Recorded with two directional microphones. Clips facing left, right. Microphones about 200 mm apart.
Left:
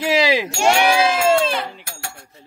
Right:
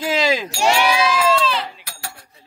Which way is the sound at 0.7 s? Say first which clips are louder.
Left 1 dB; 50° left (ahead or behind).